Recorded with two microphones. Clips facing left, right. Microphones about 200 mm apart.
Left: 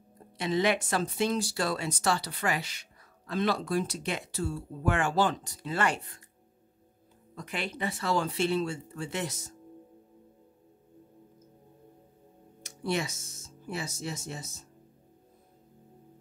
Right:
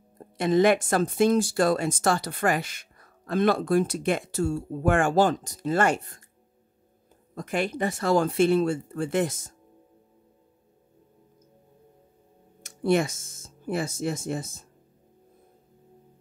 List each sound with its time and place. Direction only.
0.2 s speech: 50° right (ahead or behind)
7.3 s speech: 45° right (ahead or behind)
12.6 s speech: 50° right (ahead or behind)